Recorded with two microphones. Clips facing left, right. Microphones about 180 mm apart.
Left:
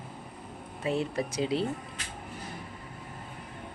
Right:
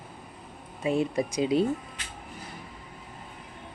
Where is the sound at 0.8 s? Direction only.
15° right (ahead or behind).